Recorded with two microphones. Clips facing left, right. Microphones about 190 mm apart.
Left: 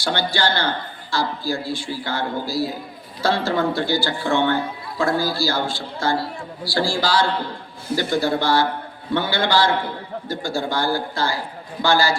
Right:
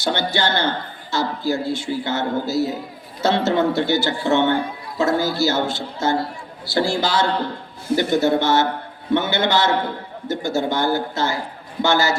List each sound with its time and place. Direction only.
0.0 s speech: 20° right (ahead or behind)